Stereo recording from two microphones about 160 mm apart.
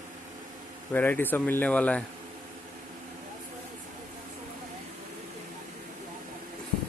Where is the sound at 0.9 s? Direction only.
10° left (ahead or behind).